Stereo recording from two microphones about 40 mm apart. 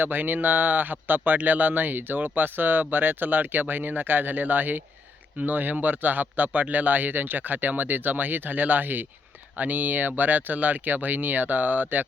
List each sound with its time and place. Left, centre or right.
0.0 s speech: right